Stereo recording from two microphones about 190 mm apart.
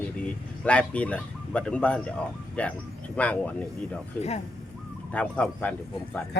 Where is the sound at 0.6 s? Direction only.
5° left (ahead or behind).